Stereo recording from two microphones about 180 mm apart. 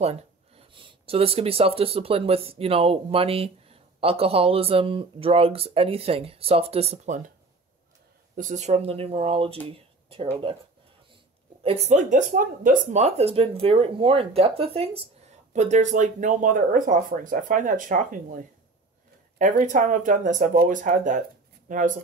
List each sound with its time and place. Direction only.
0.7 s speech: 30° right (ahead or behind)
8.4 s speech: 45° right (ahead or behind)
9.7 s a sound: 30° right (ahead or behind)
11.6 s speech: 35° right (ahead or behind)